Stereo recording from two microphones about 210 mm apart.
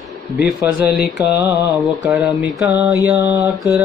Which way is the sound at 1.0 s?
5° right (ahead or behind).